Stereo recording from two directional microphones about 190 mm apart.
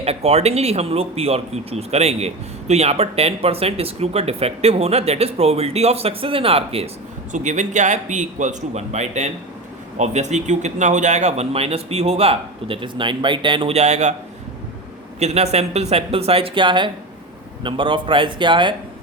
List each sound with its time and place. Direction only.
0.0 s speech: 35° right (ahead or behind)
15.2 s speech: 35° right (ahead or behind)